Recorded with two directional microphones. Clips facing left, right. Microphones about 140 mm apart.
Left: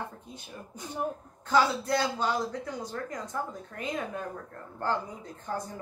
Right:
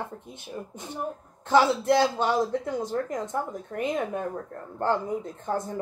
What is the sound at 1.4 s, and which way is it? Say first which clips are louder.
A woman's voice: right 4 dB; 25° right (ahead or behind).